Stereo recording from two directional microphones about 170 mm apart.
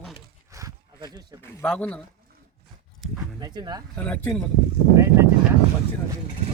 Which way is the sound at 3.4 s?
25° right (ahead or behind).